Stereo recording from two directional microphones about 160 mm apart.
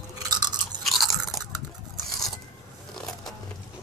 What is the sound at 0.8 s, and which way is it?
Chewing, centre (ahead or behind).